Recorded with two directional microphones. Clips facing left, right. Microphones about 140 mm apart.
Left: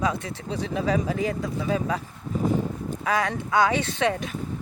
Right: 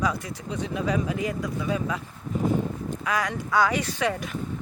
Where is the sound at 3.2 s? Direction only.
25° left (ahead or behind).